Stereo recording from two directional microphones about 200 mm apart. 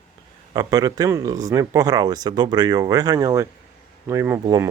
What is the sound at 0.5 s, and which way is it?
Speech, 20° right (ahead or behind).